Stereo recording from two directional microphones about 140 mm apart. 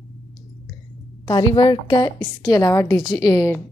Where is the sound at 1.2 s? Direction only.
35° left (ahead or behind).